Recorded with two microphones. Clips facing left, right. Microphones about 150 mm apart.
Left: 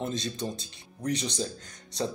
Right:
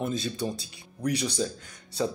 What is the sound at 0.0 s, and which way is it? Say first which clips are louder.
Speech: right 2 dB; 5° right (ahead or behind).